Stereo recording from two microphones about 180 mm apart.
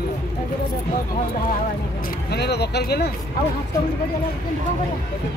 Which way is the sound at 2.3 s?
65° left (ahead or behind).